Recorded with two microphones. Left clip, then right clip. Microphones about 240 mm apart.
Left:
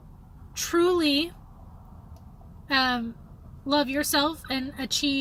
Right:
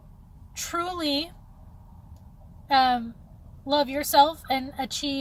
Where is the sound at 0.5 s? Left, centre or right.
Centre.